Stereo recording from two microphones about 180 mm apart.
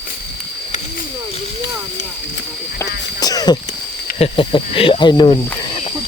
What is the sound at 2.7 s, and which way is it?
Rowboat, 20° left (ahead or behind).